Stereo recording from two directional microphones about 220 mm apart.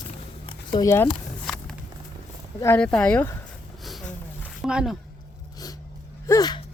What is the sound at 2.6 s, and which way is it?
Speech, 10° left (ahead or behind).